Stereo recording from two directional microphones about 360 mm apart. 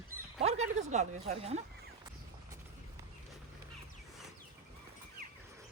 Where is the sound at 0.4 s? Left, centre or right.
Centre.